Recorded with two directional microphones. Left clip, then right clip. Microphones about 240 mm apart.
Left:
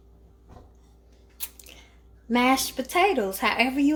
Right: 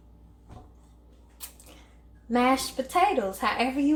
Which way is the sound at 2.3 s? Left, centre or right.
Left.